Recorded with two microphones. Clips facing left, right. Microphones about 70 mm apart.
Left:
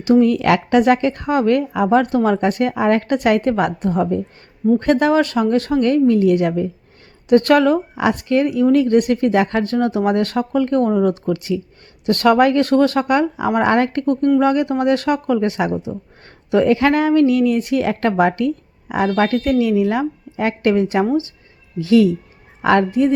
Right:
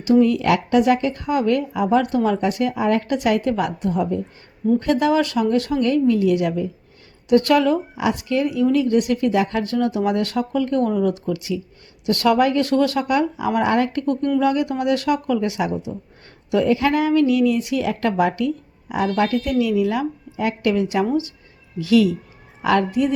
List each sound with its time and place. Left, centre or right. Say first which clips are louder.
0.0 s a woman's voice: left 2 dB; left
15.7 s speech: left 3 dB; left
16.5 s a woman's voice: left 4 dB; left